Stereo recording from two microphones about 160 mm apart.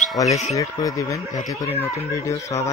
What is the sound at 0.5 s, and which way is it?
Speech, 20° left (ahead or behind).